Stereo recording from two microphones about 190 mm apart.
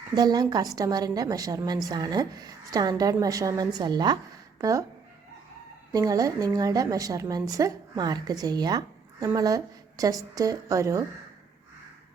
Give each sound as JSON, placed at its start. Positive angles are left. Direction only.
{"t": 0.1, "sound": "a woman's voice", "side_deg": -20}
{"t": 5.9, "sound": "a woman's voice", "side_deg": -20}